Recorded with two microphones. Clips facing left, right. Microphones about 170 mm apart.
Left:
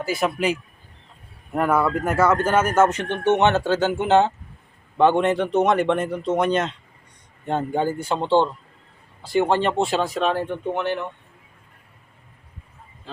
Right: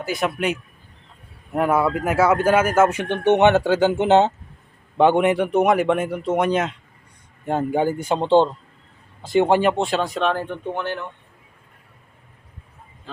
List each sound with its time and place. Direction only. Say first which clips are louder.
0.0 s a man's voice: left 1 dB; centre (ahead or behind); by 9.6 s 20° right (ahead or behind)
9.6 s speech: right 1 dB; centre (ahead or behind)